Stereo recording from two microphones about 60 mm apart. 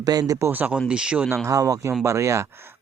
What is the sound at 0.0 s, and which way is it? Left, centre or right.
Speech, right.